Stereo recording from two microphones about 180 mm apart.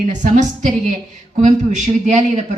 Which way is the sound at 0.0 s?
45° right (ahead or behind).